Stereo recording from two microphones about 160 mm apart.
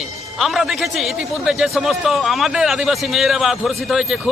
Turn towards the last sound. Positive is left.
turn(degrees=0)  # may be behind; listen again after turning